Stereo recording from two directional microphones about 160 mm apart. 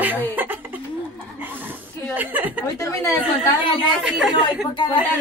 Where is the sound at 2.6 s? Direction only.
15° left (ahead or behind).